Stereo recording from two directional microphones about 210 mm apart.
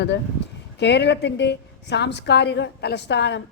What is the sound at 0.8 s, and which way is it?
A woman's voice, 55° left (ahead or behind).